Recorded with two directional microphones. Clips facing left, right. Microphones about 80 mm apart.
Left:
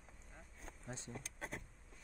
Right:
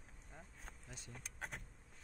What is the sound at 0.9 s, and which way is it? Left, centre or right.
Speech, left.